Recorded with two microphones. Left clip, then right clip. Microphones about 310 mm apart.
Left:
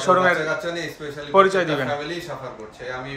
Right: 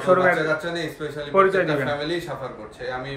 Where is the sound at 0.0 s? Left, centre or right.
Centre.